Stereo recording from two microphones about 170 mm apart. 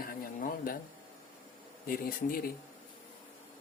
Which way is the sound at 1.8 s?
60° left (ahead or behind).